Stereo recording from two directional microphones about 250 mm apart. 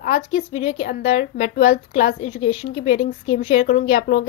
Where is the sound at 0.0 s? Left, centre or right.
Left.